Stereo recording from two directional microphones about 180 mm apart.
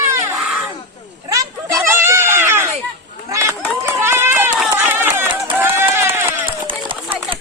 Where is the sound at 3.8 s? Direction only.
15° right (ahead or behind).